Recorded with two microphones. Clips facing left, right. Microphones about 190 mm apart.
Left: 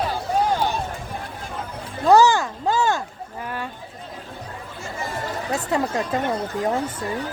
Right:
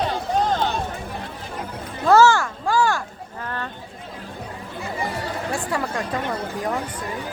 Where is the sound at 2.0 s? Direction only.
15° left (ahead or behind).